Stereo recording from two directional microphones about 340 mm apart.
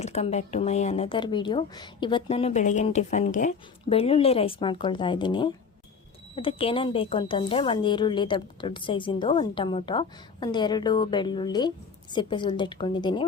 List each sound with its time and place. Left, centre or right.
0.0 s speech: centre